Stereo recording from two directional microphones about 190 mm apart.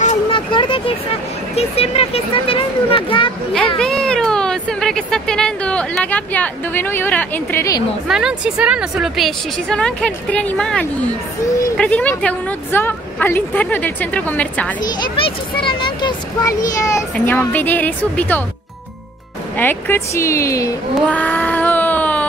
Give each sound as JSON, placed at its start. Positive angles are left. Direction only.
{"t": 0.0, "sound": "vehicle", "side_deg": 35}
{"t": 0.5, "sound": "vehicle", "side_deg": 25}
{"t": 1.5, "sound": "a child's voice", "side_deg": 35}
{"t": 3.7, "sound": "speech", "side_deg": 5}
{"t": 8.1, "sound": "speech", "side_deg": -5}
{"t": 14.8, "sound": "a child's voice", "side_deg": 20}
{"t": 19.5, "sound": "speech", "side_deg": 10}